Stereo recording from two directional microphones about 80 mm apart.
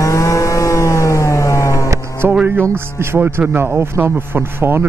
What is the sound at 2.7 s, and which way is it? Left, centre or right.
A man's voice, right.